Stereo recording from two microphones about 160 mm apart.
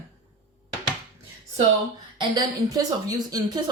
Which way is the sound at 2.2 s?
25° right (ahead or behind).